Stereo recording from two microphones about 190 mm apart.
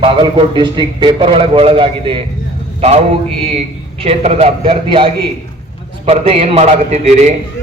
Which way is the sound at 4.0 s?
30° right (ahead or behind).